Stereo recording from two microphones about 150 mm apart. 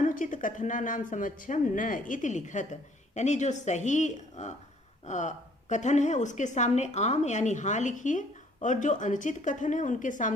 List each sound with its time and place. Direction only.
0.0 s a woman's voice: 60° left (ahead or behind)